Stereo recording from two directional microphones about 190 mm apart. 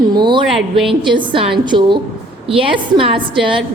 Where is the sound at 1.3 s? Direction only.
25° right (ahead or behind).